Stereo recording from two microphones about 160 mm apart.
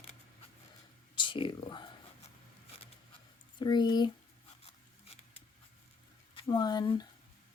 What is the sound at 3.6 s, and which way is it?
Speech, 30° left (ahead or behind).